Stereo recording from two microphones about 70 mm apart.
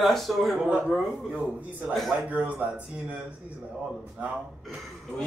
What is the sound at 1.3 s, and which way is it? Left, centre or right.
Speech, centre.